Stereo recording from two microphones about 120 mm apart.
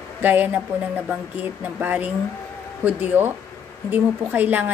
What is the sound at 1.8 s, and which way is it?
Speech, 15° right (ahead or behind).